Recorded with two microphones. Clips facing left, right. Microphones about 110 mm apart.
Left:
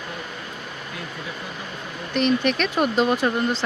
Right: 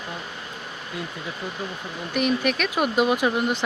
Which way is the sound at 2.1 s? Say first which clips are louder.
Left 2 dB; 10° right (ahead or behind).